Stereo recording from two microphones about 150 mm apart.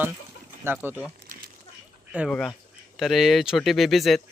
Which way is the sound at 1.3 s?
65° right (ahead or behind).